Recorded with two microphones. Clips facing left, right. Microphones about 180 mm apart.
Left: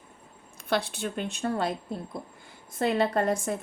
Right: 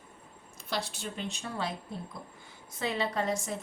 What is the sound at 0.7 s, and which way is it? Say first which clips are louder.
A woman's voice: left 7 dB; 60° left (ahead or behind).